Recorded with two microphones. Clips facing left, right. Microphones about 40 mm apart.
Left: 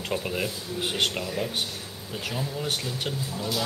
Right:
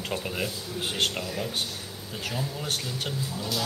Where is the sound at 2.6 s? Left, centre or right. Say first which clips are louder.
Left 2 dB; centre.